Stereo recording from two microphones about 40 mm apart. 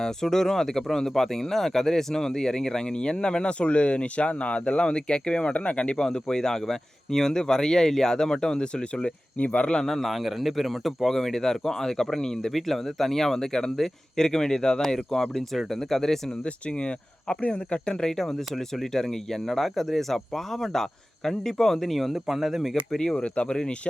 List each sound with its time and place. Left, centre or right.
0.0 s speech: centre; by 6.0 s left
6.0 s speech: centre
9.4 s speech: left
9.8 s speech: centre
16.6 s speech: left
18.0 s speech: centre
22.1 s speech: centre
23.0 s speech: centre
23.2 s speech: left